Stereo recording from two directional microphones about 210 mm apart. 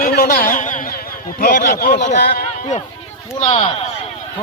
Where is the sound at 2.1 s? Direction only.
50° left (ahead or behind).